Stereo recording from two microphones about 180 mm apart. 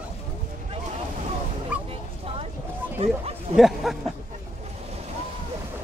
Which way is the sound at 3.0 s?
30° right (ahead or behind).